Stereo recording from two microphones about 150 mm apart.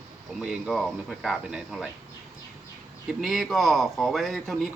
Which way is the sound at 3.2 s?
Centre (ahead or behind).